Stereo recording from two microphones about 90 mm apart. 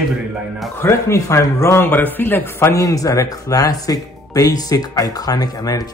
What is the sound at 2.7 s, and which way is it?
Speech, 40° left (ahead or behind).